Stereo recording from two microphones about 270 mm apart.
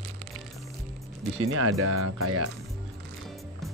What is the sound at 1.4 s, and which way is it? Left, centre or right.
Speech, right.